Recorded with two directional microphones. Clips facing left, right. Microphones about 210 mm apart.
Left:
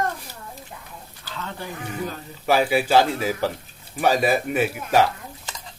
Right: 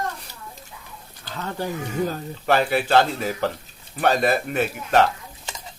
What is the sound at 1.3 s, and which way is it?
Speech, 40° right (ahead or behind).